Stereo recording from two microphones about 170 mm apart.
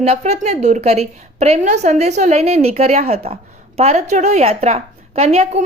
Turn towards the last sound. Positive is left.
turn(degrees=-40)  # may be behind; listen again after turning